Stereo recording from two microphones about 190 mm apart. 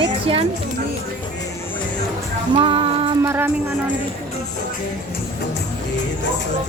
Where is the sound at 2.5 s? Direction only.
30° right (ahead or behind).